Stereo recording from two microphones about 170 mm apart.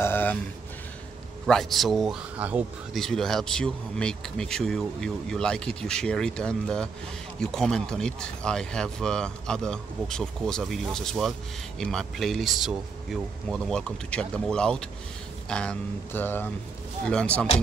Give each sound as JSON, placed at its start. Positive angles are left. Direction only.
{"t": 0.0, "sound": "speech", "side_deg": 10}
{"t": 1.4, "sound": "speech", "side_deg": 0}